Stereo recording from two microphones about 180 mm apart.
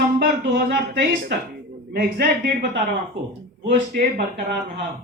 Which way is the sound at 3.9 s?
55° right (ahead or behind).